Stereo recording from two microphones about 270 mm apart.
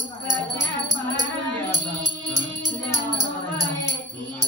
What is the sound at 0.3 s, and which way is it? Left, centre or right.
Music, centre.